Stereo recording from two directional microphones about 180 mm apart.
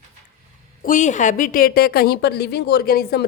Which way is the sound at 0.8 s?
45° left (ahead or behind).